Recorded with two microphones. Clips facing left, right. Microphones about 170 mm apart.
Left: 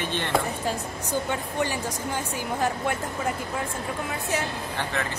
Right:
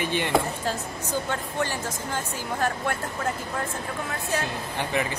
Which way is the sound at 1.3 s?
15° left (ahead or behind).